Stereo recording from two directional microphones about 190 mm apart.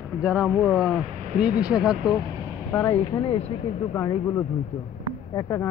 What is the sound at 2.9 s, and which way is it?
Speech, 25° left (ahead or behind).